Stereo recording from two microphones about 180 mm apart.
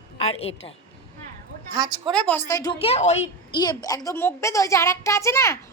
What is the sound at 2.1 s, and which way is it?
A woman's voice, 5° left (ahead or behind).